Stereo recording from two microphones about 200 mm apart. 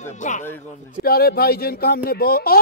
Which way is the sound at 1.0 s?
50° left (ahead or behind).